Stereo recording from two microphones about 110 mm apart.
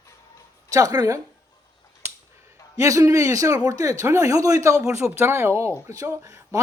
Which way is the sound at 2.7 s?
30° right (ahead or behind).